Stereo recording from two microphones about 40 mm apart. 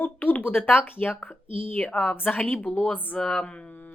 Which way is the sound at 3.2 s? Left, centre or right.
Centre.